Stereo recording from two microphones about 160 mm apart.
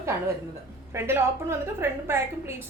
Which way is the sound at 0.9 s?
15° right (ahead or behind).